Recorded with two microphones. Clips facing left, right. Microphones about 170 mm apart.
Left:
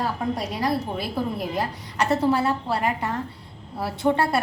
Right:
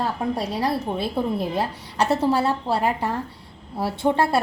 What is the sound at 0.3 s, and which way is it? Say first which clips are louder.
A woman's voice: right 1 dB; 30° right (ahead or behind).